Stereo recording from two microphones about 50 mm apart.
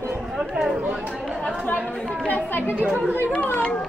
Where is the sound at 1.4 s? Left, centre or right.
Left.